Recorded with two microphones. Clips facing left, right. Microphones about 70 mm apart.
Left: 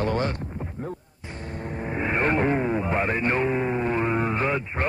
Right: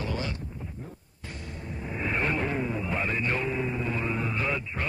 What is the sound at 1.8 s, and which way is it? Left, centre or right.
Vehicle, left.